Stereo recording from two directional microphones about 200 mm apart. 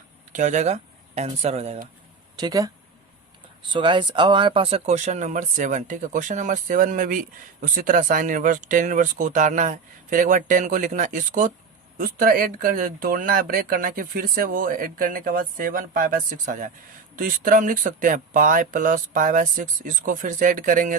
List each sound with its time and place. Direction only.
0.3 s speech: 35° right (ahead or behind)
2.4 s speech: 20° right (ahead or behind)
3.7 s speech: 25° right (ahead or behind); by 20.9 s 40° right (ahead or behind)